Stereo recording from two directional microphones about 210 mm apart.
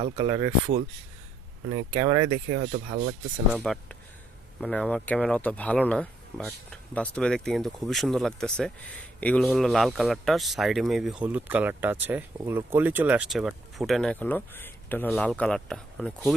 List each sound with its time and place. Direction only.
0.2 s speech: 20° right (ahead or behind)
1.7 s speech: 20° right (ahead or behind)
2.6 s speech: 30° right (ahead or behind)
3.5 s speech: centre (ahead or behind)